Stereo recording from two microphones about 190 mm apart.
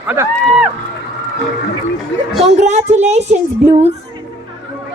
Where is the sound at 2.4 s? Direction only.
35° right (ahead or behind).